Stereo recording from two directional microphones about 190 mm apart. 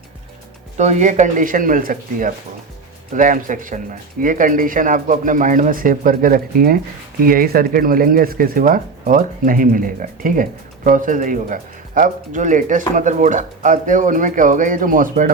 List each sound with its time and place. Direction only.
0.8 s speech: 40° right (ahead or behind)